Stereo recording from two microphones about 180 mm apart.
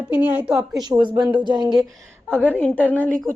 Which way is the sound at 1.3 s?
25° right (ahead or behind).